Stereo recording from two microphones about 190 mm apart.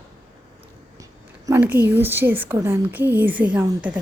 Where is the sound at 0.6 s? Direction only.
15° right (ahead or behind).